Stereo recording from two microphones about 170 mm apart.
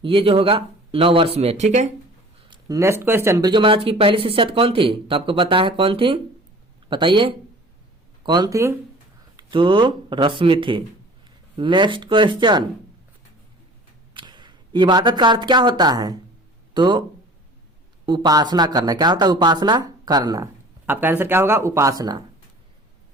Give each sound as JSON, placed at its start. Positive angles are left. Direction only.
{"t": 0.0, "sound": "speech", "side_deg": -30}
{"t": 2.5, "sound": "speech", "side_deg": -20}
{"t": 14.1, "sound": "speech", "side_deg": -25}
{"t": 18.0, "sound": "speech", "side_deg": -25}